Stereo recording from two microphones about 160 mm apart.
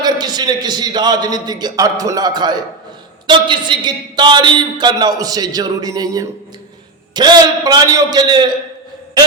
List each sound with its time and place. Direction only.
0.0 s a man's voice: 25° right (ahead or behind)